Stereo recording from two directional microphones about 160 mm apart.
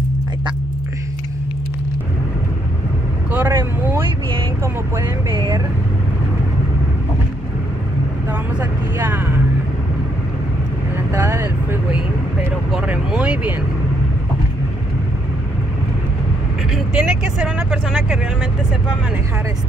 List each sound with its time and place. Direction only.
3.3 s vehicle: 10° right (ahead or behind)
5.3 s vehicle: 30° right (ahead or behind)
8.3 s vehicle: 15° right (ahead or behind)
11.1 s vehicle: 15° right (ahead or behind)
12.7 s a sound: 5° right (ahead or behind)
16.7 s vehicle: 5° right (ahead or behind)